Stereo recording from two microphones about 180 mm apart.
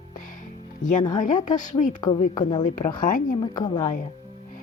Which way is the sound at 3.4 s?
25° left (ahead or behind).